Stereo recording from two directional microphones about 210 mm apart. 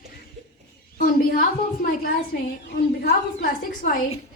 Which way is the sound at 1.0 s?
45° left (ahead or behind).